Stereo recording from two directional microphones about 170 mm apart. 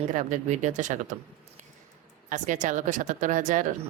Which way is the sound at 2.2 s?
50° right (ahead or behind).